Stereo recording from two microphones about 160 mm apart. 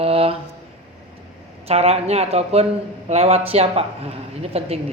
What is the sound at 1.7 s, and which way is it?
Speech, 40° right (ahead or behind).